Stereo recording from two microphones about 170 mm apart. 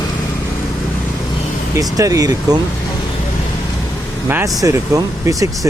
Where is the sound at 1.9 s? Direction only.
20° right (ahead or behind).